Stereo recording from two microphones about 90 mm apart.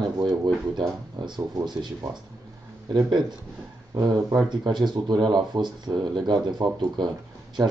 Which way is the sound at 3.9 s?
40° right (ahead or behind).